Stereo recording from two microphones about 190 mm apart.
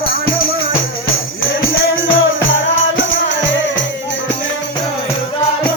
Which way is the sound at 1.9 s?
90° left.